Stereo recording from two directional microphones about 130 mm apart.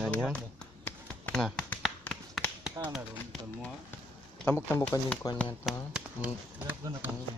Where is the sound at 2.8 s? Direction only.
25° right (ahead or behind).